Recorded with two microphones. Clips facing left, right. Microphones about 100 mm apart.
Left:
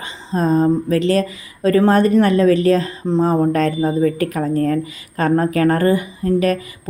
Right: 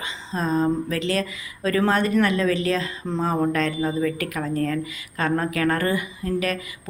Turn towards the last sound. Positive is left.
turn(degrees=40)  # may be behind; listen again after turning